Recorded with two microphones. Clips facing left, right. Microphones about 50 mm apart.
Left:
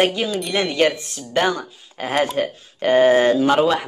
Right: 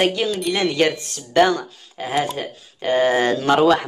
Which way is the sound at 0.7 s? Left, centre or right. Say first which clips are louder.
Left 1 dB; left.